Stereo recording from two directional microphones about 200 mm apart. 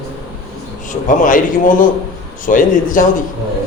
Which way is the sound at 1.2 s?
40° left (ahead or behind).